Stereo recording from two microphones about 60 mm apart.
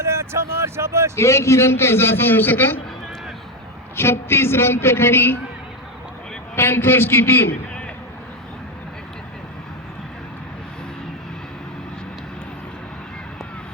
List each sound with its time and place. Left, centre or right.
0.0 s speech: right
1.1 s a man's voice: left
3.9 s a woman's voice: left
6.6 s a woman's voice: left